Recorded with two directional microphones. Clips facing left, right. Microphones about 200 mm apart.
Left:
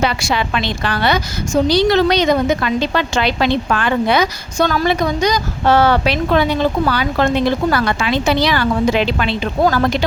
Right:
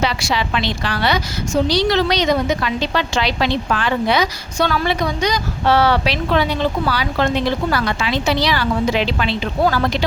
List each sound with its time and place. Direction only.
0.0 s a woman's voice: 50° left (ahead or behind)